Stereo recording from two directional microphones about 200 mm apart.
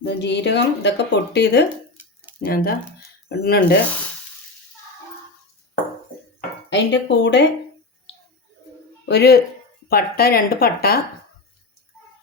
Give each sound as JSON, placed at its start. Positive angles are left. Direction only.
{"t": 0.0, "sound": "speech", "side_deg": 60}
{"t": 6.7, "sound": "speech", "side_deg": 60}
{"t": 9.0, "sound": "speech", "side_deg": 55}